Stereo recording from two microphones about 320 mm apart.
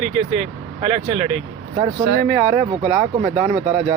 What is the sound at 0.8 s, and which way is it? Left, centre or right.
Speech, centre.